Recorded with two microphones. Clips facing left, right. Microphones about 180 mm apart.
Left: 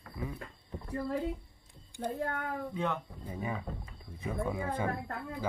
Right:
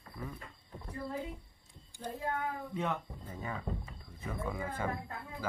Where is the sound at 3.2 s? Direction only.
15° left (ahead or behind).